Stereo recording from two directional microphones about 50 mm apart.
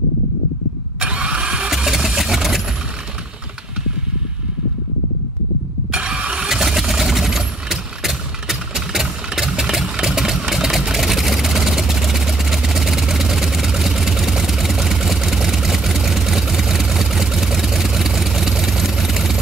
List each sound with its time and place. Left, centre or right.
0.9 s engine starting: right
1.9 s vehicle: centre
5.9 s vehicle: right